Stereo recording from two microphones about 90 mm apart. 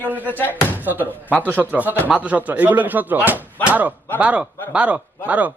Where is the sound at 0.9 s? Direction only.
20° right (ahead or behind).